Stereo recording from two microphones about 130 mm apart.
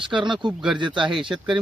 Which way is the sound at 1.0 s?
5° right (ahead or behind).